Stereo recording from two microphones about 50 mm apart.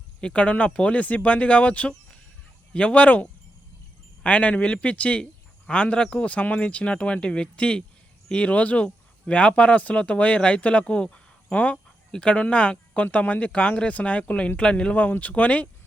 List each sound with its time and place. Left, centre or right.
0.2 s speech: left